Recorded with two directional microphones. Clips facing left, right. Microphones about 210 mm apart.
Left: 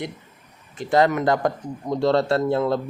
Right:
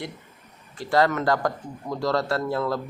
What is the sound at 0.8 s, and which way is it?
A man's voice, 20° left (ahead or behind).